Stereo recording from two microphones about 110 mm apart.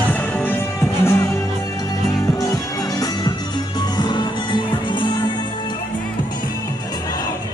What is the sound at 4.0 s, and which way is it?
Music, 40° left (ahead or behind).